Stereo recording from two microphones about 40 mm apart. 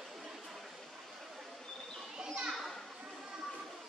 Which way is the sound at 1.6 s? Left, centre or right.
Centre.